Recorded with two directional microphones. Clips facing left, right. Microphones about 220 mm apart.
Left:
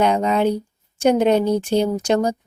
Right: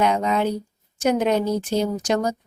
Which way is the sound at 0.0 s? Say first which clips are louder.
Left 3 dB; 30° left (ahead or behind).